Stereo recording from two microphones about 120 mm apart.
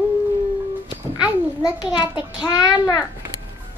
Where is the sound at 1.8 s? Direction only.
35° left (ahead or behind).